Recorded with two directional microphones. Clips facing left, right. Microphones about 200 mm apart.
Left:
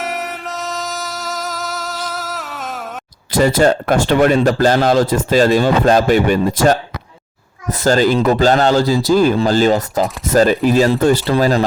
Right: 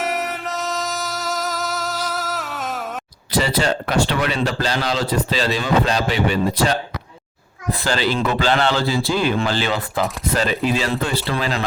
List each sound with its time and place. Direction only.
0.0 s music: centre (ahead or behind)
3.3 s speech: 50° left (ahead or behind)